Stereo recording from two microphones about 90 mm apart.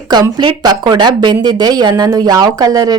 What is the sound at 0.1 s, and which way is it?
Speech, 55° right (ahead or behind).